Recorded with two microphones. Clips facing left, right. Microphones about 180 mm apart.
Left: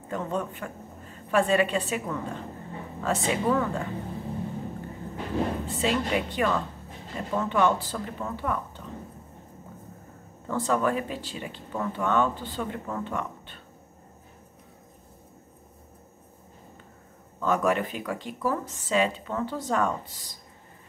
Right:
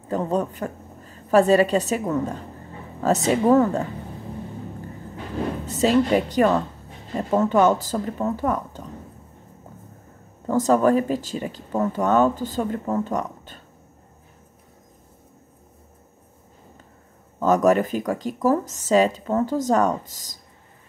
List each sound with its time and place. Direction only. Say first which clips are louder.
0.1 s speech: right 7 dB; 35° right (ahead or behind)
5.7 s speech: right 13 dB; 40° right (ahead or behind)
10.4 s speech: right 8 dB; 40° right (ahead or behind)
17.4 s speech: right 7 dB; 40° right (ahead or behind)